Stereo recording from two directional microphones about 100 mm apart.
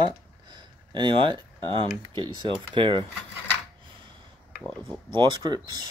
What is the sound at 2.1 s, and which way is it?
Speech, 50° right (ahead or behind).